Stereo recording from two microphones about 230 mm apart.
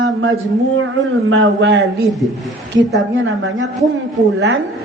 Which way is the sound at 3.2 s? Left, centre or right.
Right.